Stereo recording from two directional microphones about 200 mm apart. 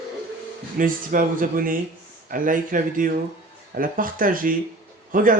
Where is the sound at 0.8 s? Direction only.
45° right (ahead or behind).